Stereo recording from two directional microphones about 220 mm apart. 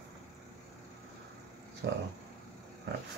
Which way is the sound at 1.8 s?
50° right (ahead or behind).